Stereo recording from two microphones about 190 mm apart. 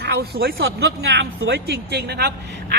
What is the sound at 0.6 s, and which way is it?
A man's voice, 70° right (ahead or behind).